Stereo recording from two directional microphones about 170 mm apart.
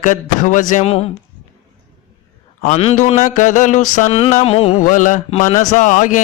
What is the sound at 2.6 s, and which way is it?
Mantra, 40° left (ahead or behind).